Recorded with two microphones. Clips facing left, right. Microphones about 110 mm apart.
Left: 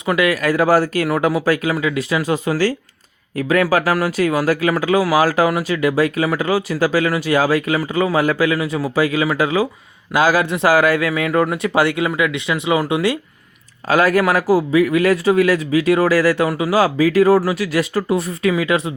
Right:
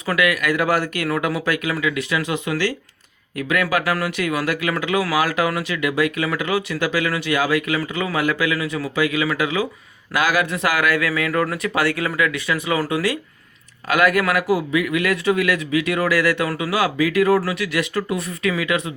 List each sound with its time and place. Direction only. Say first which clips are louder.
0.0 s a man's voice: left 3 dB; 25° left (ahead or behind)